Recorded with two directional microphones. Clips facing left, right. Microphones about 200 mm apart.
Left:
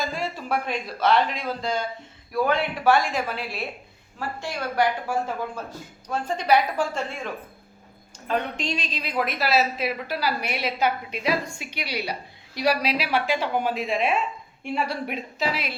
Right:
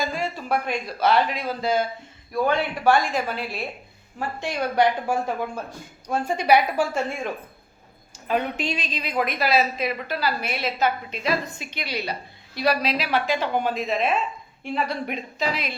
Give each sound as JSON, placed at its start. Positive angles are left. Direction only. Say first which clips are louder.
{"t": 0.0, "sound": "a woman's voice", "louder": "right 2 dB", "side_deg": 0}
{"t": 4.4, "sound": "a woman's voice", "louder": "right 3 dB", "side_deg": -20}
{"t": 8.3, "sound": "a woman's voice", "louder": "right 2 dB", "side_deg": -5}